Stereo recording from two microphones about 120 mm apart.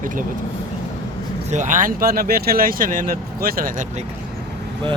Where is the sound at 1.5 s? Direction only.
90° right.